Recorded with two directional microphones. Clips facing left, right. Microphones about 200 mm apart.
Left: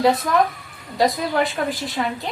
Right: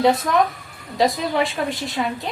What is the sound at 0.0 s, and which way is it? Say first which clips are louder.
A woman's voice: even; centre (ahead or behind).